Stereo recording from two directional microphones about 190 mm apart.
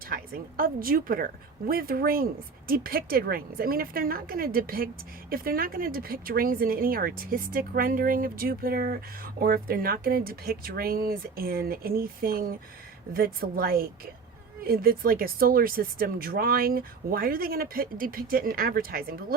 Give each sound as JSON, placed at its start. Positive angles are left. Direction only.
{"t": 0.1, "sound": "speech", "side_deg": -50}